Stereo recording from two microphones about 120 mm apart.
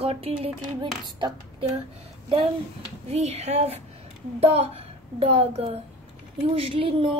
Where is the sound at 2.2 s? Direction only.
50° right (ahead or behind).